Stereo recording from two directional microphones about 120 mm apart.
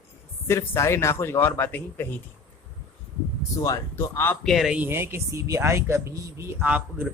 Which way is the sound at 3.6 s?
25° left (ahead or behind).